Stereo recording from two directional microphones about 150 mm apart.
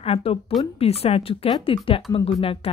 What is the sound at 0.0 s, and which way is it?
A woman's voice, 40° left (ahead or behind).